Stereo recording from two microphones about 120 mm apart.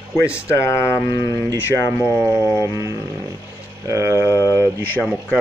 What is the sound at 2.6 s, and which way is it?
Roaring cats, 25° right (ahead or behind).